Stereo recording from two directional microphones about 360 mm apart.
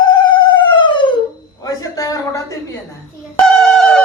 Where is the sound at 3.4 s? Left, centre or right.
Centre.